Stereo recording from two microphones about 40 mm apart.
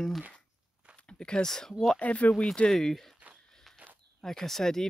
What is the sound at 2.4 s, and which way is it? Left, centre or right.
Speech, left.